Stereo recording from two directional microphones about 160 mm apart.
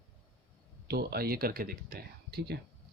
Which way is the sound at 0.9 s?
75° right (ahead or behind).